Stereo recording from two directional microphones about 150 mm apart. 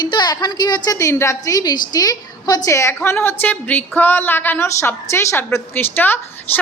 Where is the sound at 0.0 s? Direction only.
30° left (ahead or behind).